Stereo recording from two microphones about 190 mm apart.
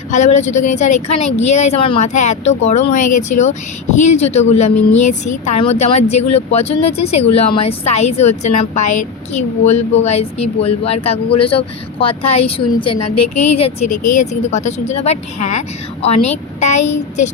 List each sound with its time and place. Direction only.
0.1 s speech: 40° left (ahead or behind)